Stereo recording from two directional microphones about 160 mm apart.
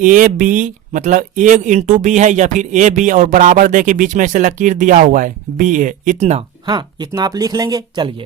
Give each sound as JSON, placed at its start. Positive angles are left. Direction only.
{"t": 0.0, "sound": "speech", "side_deg": -55}
{"t": 6.7, "sound": "speech", "side_deg": -30}